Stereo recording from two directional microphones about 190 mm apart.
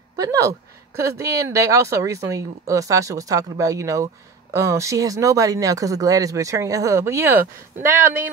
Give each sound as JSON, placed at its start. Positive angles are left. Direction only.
{"t": 0.1, "sound": "speech", "side_deg": -20}